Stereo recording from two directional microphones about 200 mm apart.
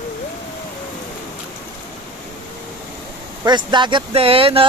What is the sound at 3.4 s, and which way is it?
Speech, 20° right (ahead or behind).